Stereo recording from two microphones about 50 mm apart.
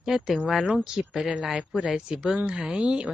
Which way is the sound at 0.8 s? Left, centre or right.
Centre.